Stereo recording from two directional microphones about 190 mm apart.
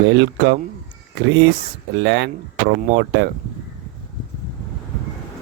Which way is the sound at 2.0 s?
70° right (ahead or behind).